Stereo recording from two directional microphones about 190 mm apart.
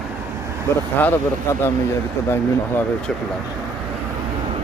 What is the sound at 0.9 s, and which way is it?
Speech, 10° left (ahead or behind).